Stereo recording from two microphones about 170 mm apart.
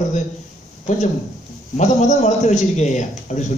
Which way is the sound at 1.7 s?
45° left (ahead or behind).